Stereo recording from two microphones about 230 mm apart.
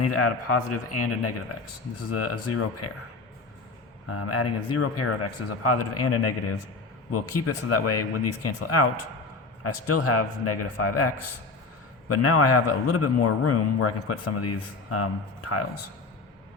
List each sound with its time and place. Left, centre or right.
0.1 s speech: left
4.1 s a man's voice: left